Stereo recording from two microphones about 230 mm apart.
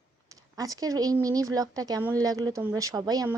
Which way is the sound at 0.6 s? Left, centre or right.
Centre.